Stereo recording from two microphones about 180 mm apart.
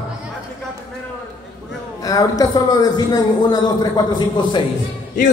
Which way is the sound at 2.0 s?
20° left (ahead or behind).